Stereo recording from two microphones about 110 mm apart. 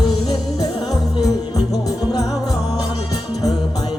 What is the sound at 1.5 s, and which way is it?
Music, 35° left (ahead or behind).